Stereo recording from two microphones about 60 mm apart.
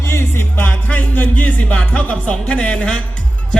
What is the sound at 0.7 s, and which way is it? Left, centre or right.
Music, left.